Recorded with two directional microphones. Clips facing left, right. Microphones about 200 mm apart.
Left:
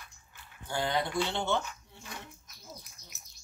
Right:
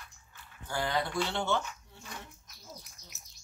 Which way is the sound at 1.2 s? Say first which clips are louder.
Even; 15° left (ahead or behind).